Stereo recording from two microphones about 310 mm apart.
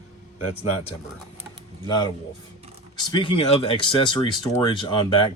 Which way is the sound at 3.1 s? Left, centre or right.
Centre.